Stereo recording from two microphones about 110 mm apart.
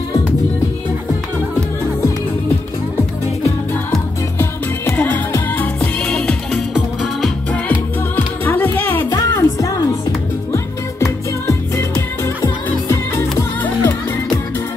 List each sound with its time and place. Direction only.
4.4 s music: 15° left (ahead or behind)
8.5 s music: 20° left (ahead or behind)
9.1 s music: 30° left (ahead or behind)